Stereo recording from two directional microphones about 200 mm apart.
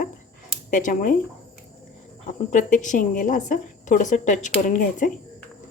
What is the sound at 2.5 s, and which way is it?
A woman's voice, 40° left (ahead or behind).